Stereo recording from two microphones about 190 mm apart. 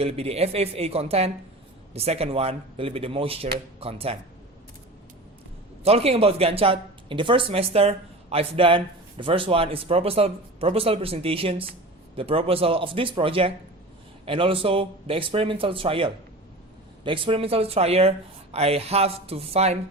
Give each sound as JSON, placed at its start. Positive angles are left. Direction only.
{"t": 0.0, "sound": "speech", "side_deg": -30}
{"t": 5.8, "sound": "speech", "side_deg": -30}